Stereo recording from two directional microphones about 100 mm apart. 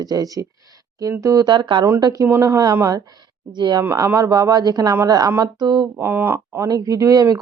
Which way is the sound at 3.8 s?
25° right (ahead or behind).